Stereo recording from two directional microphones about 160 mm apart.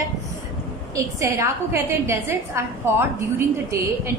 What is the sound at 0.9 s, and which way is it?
A woman's voice, 20° right (ahead or behind).